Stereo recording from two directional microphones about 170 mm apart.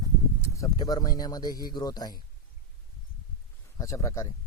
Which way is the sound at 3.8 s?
20° left (ahead or behind).